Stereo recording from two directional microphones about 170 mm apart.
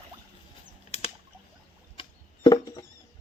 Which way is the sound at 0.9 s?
40° left (ahead or behind).